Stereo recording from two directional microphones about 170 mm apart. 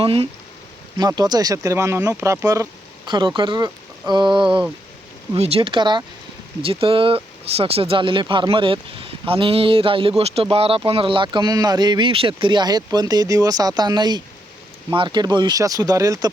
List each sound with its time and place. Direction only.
0.0 s speech: 30° right (ahead or behind)